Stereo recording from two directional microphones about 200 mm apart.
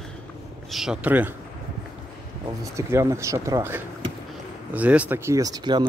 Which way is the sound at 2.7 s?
15° right (ahead or behind).